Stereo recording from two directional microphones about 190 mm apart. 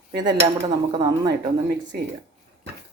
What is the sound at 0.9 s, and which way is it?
Speech, 20° right (ahead or behind).